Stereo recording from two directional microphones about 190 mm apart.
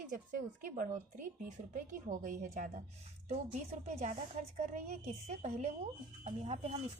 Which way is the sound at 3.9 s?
35° right (ahead or behind).